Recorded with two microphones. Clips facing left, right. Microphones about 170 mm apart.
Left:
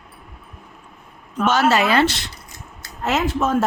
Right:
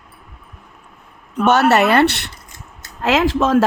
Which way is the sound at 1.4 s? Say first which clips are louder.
Right 4 dB; 65° right (ahead or behind).